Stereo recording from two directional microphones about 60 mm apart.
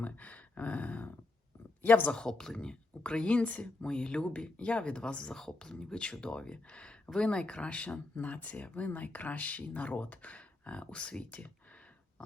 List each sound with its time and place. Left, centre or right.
0.0 s a sound: left
1.8 s speech: left
2.1 s speech: centre